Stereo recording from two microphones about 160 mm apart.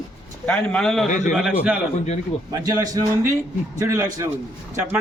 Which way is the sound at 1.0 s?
50° left (ahead or behind).